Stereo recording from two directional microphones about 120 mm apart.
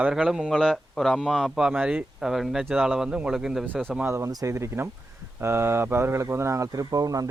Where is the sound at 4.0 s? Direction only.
25° right (ahead or behind).